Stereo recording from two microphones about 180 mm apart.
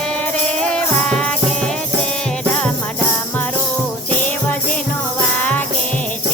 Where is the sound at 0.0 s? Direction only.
5° left (ahead or behind).